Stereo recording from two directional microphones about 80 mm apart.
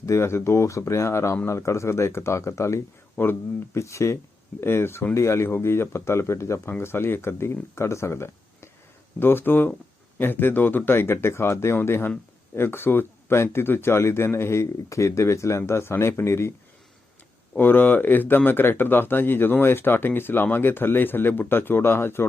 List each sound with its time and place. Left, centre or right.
0.0 s speech: left
3.2 s speech: left
3.8 s speech: left
17.6 s speech: left